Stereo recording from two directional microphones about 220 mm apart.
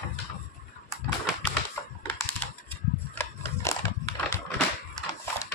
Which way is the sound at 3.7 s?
15° left (ahead or behind).